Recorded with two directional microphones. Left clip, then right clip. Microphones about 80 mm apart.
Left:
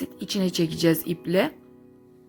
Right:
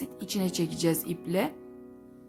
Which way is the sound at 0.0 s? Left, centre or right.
Left.